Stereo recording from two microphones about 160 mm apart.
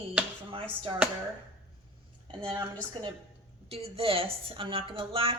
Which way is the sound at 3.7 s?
35° right (ahead or behind).